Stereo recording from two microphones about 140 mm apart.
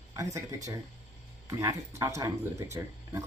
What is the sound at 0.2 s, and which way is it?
Speech, 25° right (ahead or behind).